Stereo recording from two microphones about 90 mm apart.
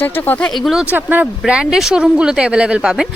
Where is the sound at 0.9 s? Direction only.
20° right (ahead or behind).